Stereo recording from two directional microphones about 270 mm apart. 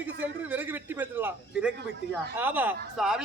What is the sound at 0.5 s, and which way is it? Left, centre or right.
A man's voice, centre.